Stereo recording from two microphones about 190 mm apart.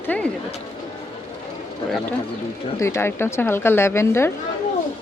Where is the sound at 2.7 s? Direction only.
15° left (ahead or behind).